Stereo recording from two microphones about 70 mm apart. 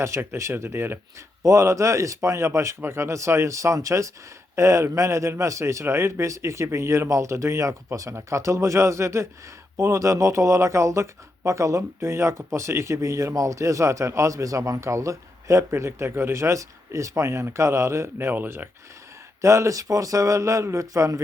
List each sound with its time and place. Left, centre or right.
0.0 s speech: right
1.4 s speech: right
18.3 s speech: right
19.4 s speech: right